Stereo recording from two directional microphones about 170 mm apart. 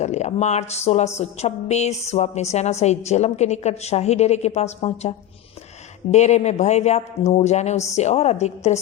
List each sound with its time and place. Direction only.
0.0 s a woman's voice: 40° left (ahead or behind)